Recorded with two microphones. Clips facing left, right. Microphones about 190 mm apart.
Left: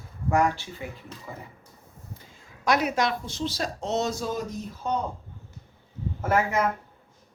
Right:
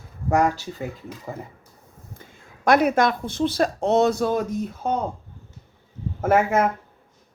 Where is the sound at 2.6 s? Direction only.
55° right (ahead or behind).